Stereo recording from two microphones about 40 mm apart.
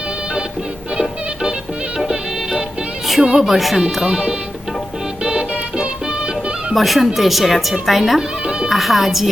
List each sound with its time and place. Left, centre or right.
0.9 s music: centre
3.3 s speech: centre
4.0 s speech: centre
5.2 s music: right
6.7 s speech: centre